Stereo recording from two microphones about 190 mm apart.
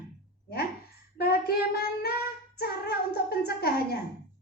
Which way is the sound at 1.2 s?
55° left (ahead or behind).